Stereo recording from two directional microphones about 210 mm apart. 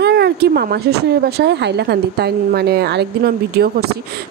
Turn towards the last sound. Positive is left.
turn(degrees=-50)  # may be behind; listen again after turning